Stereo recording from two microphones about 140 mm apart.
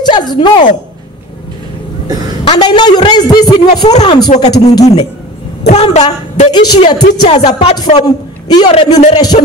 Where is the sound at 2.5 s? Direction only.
30° left (ahead or behind).